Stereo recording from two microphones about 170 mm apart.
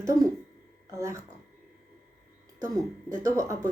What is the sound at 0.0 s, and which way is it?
Speech, 20° right (ahead or behind).